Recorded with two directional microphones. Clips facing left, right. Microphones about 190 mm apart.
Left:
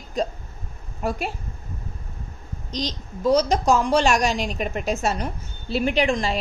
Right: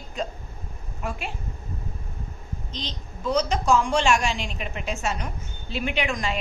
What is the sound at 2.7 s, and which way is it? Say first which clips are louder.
A woman's voice: left 10 dB; 40° left (ahead or behind).